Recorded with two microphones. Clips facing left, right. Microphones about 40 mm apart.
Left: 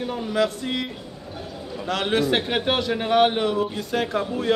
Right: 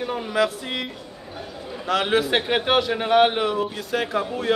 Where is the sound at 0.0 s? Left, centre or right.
Centre.